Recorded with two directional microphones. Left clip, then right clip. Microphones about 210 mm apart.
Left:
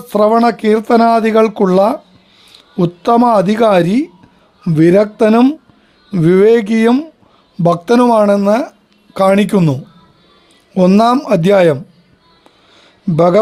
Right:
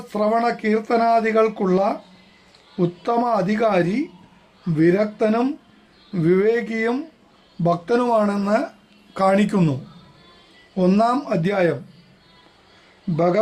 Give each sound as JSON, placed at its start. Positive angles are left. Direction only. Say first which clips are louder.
{"t": 0.1, "sound": "speech", "louder": "left 9 dB", "side_deg": 50}
{"t": 10.8, "sound": "speech", "louder": "left 8 dB", "side_deg": 45}
{"t": 13.1, "sound": "speech", "louder": "left 9 dB", "side_deg": 50}